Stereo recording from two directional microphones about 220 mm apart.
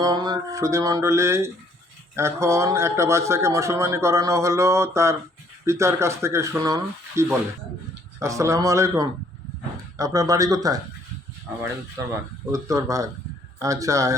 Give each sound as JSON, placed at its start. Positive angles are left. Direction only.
{"t": 0.0, "sound": "a man's voice", "side_deg": -20}
{"t": 12.5, "sound": "a man's voice", "side_deg": -15}